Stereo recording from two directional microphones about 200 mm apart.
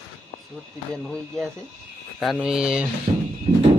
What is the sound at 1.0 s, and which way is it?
A man's voice, 5° left (ahead or behind).